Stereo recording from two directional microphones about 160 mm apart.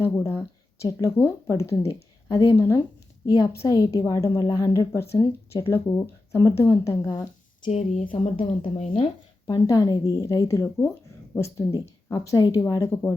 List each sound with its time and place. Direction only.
0.0 s a woman's voice: 15° left (ahead or behind)
7.7 s speech: 45° left (ahead or behind)
9.6 s speech: 20° left (ahead or behind)